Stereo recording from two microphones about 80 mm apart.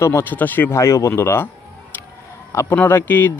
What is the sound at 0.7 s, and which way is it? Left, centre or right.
Speech, left.